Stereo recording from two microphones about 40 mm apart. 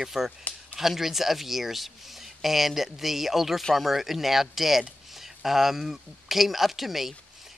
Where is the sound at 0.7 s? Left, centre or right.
Centre.